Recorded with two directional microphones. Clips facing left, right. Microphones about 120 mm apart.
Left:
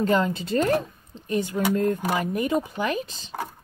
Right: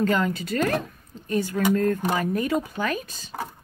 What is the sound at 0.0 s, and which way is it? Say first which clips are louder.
Speech: left 1 dB; 25° left (ahead or behind).